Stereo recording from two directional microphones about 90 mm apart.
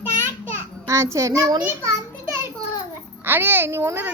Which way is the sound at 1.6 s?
30° right (ahead or behind).